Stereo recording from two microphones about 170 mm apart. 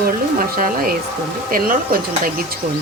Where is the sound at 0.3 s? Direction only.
55° right (ahead or behind).